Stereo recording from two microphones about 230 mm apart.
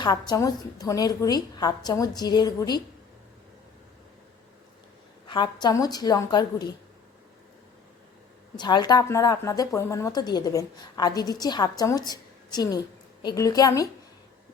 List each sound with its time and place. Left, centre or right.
0.0 s a woman's voice: centre
5.3 s a woman's voice: centre
8.5 s a woman's voice: centre